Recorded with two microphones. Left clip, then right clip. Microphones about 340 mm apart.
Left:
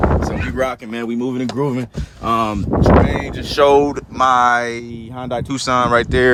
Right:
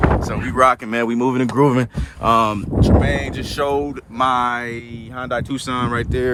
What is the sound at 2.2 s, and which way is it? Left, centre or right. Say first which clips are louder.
Speech: right 2 dB; centre.